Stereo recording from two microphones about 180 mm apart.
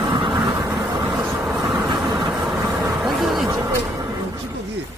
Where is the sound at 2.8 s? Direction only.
Centre (ahead or behind).